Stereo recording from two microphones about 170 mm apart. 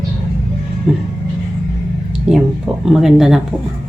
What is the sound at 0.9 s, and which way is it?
Speech, centre (ahead or behind).